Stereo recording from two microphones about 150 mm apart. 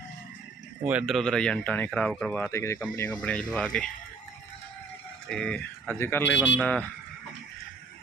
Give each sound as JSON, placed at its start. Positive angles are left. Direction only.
{"t": 0.9, "sound": "speech", "side_deg": -10}
{"t": 1.1, "sound": "speech", "side_deg": 5}
{"t": 2.5, "sound": "speech", "side_deg": 20}
{"t": 3.1, "sound": "speech", "side_deg": 5}
{"t": 5.3, "sound": "speech", "side_deg": 5}